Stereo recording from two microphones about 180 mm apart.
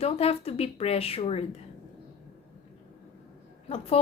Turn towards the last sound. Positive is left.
turn(degrees=30)  # may be behind; listen again after turning